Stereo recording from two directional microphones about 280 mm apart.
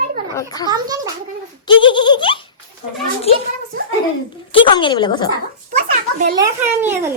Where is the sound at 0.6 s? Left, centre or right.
Centre.